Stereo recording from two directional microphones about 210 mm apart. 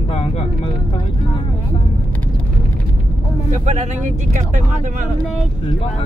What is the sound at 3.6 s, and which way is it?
Speech, 35° right (ahead or behind).